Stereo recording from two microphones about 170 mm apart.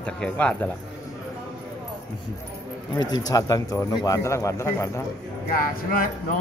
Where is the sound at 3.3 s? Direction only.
20° left (ahead or behind).